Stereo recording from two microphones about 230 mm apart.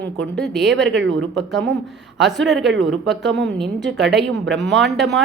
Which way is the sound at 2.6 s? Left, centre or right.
Right.